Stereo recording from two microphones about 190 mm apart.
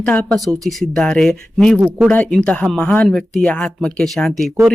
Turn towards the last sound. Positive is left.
turn(degrees=0)  # may be behind; listen again after turning